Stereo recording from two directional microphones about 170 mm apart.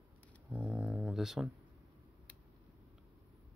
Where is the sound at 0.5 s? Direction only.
10° right (ahead or behind).